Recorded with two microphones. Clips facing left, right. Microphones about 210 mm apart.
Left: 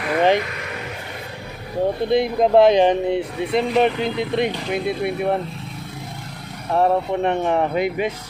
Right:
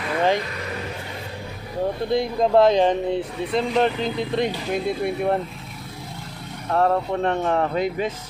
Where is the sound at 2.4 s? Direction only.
15° left (ahead or behind).